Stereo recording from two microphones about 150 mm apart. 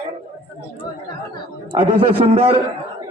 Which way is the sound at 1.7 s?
35° right (ahead or behind).